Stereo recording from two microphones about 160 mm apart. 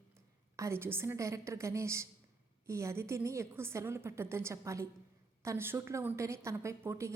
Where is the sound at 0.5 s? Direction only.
15° right (ahead or behind).